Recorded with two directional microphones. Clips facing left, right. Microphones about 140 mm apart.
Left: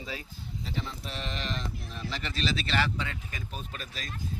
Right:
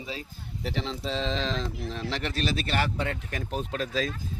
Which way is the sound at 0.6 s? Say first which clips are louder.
Right 6 dB; 75° right (ahead or behind).